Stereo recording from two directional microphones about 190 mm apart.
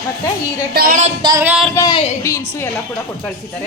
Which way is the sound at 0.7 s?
50° right (ahead or behind).